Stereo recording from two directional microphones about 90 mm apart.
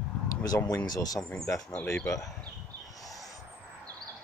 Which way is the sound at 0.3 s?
40° left (ahead or behind).